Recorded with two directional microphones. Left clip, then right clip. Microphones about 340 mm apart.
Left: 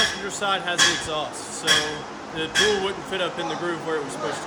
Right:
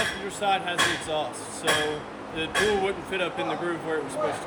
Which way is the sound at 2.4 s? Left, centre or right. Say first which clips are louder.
Left 3 dB; centre.